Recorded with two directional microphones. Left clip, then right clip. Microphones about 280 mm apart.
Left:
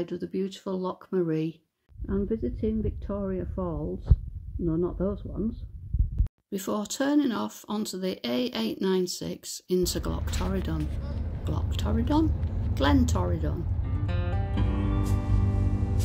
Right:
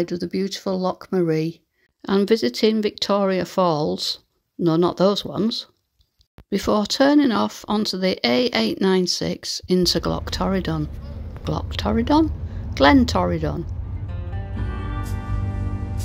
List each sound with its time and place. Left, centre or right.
0.0 s speech: right
2.0 s speech: right
14.0 s music: centre